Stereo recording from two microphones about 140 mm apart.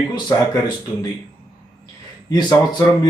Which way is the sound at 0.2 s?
30° left (ahead or behind).